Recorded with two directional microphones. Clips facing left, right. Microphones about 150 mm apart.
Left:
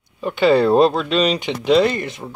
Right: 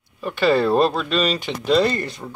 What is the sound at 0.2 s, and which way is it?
Speech, 20° left (ahead or behind).